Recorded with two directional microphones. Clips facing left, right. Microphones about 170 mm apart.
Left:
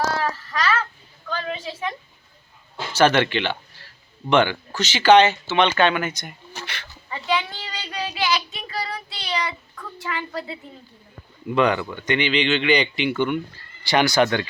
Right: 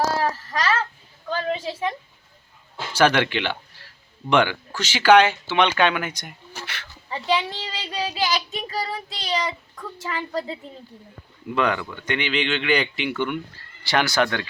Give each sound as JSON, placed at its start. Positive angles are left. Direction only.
{"t": 0.2, "sound": "a sound", "side_deg": -35}
{"t": 2.7, "sound": "speech", "side_deg": -10}
{"t": 7.1, "sound": "child singing", "side_deg": -35}
{"t": 10.0, "sound": "a woman's voice", "side_deg": -35}
{"t": 11.5, "sound": "speech", "side_deg": 0}